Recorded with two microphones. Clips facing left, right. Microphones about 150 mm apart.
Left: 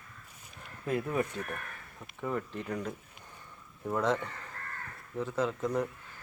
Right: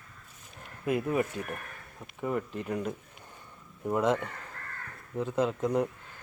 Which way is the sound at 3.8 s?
15° right (ahead or behind).